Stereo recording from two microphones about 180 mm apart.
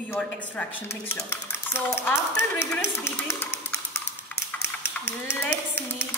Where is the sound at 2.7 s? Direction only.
15° left (ahead or behind).